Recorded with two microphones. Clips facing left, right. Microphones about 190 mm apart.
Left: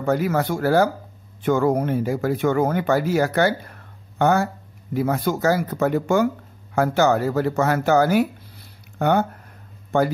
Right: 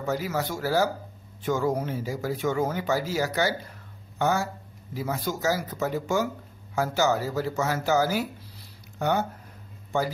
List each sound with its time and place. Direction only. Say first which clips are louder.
0.0 s speech: left 7 dB; 60° left (ahead or behind)